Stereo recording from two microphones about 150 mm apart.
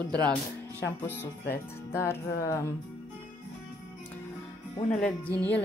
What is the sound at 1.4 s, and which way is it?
Speech, 90° left.